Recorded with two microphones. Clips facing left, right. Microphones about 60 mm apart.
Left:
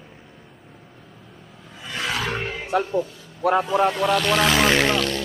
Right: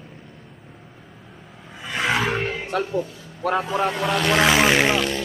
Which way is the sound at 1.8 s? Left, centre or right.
Right.